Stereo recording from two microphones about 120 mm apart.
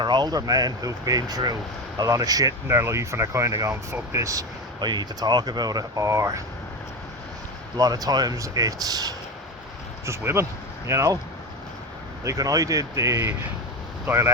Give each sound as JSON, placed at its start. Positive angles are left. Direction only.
{"t": 0.0, "sound": "speech", "side_deg": -40}
{"t": 7.8, "sound": "speech", "side_deg": -30}
{"t": 10.8, "sound": "speech", "side_deg": -25}
{"t": 12.2, "sound": "speech", "side_deg": -30}